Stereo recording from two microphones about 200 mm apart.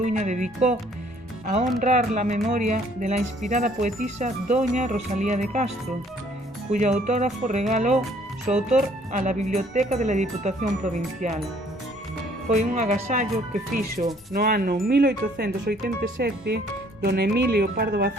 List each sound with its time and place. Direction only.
0.0 s speech: 35° right (ahead or behind)
1.8 s speech: 35° right (ahead or behind)
12.5 s speech: 35° right (ahead or behind)